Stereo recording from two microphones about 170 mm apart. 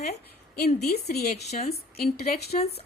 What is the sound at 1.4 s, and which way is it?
Speech, 40° left (ahead or behind).